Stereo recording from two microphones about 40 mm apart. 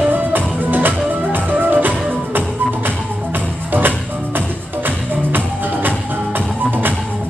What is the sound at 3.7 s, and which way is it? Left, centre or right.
Music, right.